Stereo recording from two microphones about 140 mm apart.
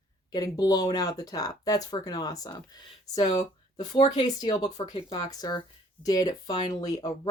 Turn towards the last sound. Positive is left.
turn(degrees=25)  # may be behind; listen again after turning